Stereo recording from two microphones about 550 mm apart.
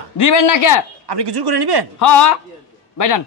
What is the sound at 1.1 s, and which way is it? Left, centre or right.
Speech, right.